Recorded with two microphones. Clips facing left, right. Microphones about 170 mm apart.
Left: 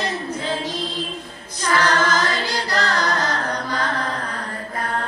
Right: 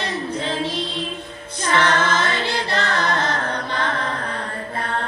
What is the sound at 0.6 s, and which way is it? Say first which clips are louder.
Music: right 1 dB; 30° right (ahead or behind).